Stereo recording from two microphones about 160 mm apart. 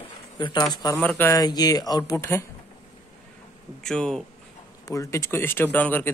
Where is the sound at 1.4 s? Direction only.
25° left (ahead or behind).